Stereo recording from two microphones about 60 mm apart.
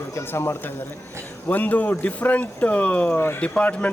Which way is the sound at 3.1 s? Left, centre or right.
Left.